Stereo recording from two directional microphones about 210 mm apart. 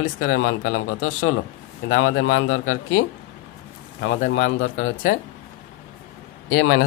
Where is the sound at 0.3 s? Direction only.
70° left (ahead or behind).